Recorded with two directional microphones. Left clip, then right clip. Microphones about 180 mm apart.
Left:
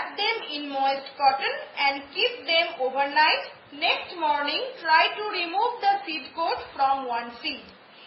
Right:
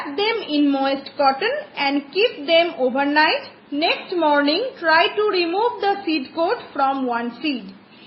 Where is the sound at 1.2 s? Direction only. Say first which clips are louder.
Right 4 dB; 50° right (ahead or behind).